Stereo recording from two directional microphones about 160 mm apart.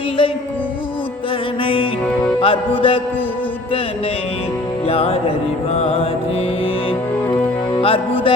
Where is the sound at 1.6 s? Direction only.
35° left (ahead or behind).